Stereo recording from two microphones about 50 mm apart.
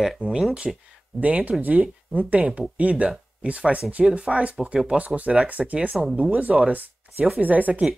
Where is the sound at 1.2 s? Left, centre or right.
Right.